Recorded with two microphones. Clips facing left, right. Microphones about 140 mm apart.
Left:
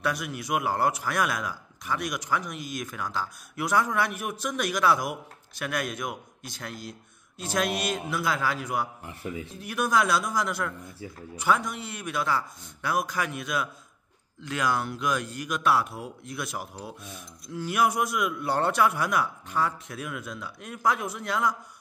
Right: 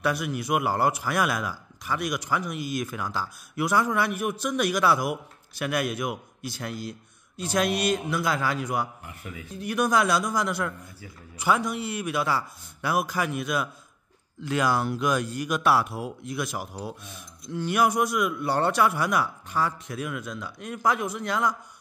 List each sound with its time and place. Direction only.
0.0 s a man's voice: centre (ahead or behind)
9.0 s speech: 25° left (ahead or behind)
9.6 s a man's voice: centre (ahead or behind)